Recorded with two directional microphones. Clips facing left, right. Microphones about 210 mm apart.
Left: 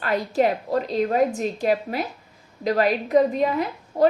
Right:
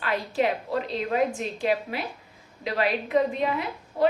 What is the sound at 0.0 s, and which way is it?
A woman's voice, 45° left (ahead or behind).